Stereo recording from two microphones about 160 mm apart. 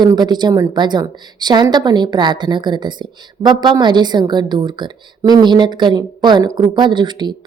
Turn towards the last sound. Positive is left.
turn(degrees=-25)  # may be behind; listen again after turning